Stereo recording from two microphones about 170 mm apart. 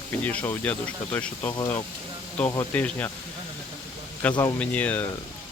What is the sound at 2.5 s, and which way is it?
Speech, 10° left (ahead or behind).